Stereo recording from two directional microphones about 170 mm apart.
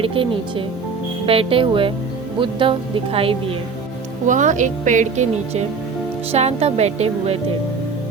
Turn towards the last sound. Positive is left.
turn(degrees=-40)  # may be behind; listen again after turning